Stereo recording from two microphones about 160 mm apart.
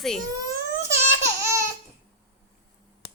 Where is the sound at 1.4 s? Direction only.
20° right (ahead or behind).